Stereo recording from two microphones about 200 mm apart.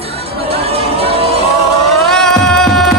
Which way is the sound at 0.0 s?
30° right (ahead or behind).